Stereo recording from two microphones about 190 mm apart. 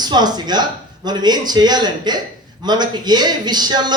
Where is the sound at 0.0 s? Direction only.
20° right (ahead or behind).